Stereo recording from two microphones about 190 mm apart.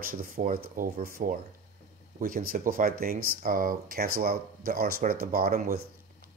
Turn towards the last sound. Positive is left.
turn(degrees=-50)  # may be behind; listen again after turning